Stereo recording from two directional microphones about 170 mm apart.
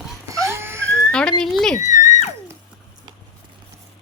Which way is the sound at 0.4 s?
15° right (ahead or behind).